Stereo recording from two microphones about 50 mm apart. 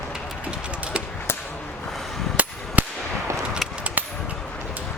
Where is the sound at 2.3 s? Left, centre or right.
Right.